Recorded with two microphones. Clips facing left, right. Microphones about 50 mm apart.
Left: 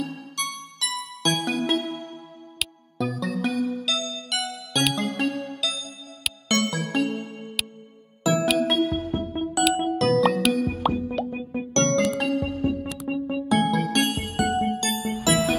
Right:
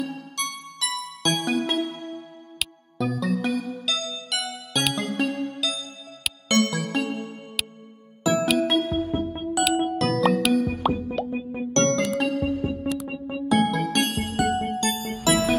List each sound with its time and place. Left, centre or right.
0.4 s music: centre